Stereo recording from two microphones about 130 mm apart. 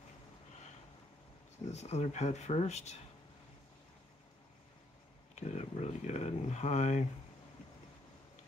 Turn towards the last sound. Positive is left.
turn(degrees=60)  # may be behind; listen again after turning